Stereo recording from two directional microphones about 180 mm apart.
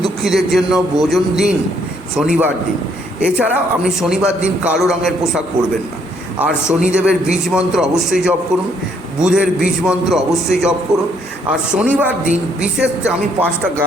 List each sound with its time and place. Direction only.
0.0 s a man's voice: centre (ahead or behind)
6.4 s a man's voice: 5° right (ahead or behind)
11.7 s a man's voice: 5° right (ahead or behind)